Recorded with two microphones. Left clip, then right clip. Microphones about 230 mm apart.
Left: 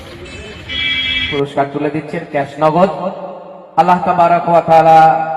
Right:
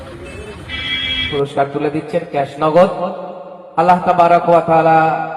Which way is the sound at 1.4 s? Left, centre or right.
Left.